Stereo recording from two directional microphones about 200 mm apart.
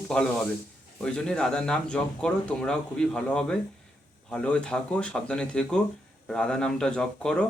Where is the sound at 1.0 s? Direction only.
5° left (ahead or behind).